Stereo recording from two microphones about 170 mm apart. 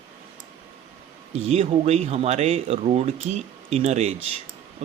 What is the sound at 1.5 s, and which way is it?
Speech, 40° right (ahead or behind).